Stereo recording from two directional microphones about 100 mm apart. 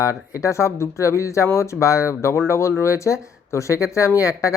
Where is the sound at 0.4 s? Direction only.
30° left (ahead or behind).